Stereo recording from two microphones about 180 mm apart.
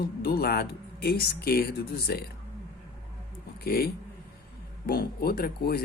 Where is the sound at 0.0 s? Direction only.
60° left (ahead or behind).